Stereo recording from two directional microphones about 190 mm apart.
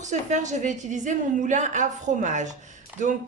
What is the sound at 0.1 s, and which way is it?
Speech, 40° right (ahead or behind).